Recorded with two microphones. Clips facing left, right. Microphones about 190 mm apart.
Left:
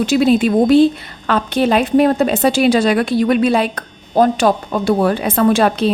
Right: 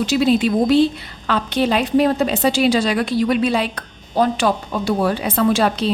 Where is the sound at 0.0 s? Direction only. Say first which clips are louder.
Left 3 dB; 55° left (ahead or behind).